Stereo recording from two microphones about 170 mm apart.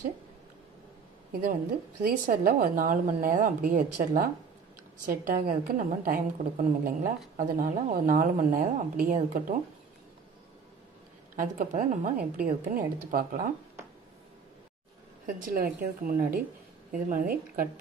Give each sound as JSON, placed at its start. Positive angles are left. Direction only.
{"t": 2.0, "sound": "a woman's voice", "side_deg": -55}
{"t": 11.3, "sound": "a woman's voice", "side_deg": -50}
{"t": 15.4, "sound": "a woman's voice", "side_deg": -60}